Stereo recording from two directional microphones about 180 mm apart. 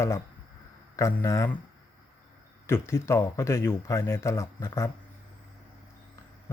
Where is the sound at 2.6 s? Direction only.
15° left (ahead or behind).